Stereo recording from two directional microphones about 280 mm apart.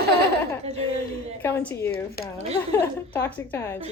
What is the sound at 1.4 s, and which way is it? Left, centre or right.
Speech, centre.